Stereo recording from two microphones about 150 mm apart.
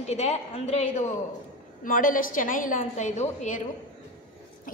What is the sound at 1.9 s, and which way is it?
A woman's voice, 70° left (ahead or behind).